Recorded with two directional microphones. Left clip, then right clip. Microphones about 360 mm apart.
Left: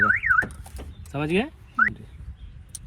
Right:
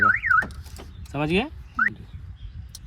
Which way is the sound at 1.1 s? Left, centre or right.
Right.